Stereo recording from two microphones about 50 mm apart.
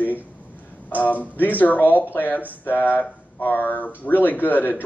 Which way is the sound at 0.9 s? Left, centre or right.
Left.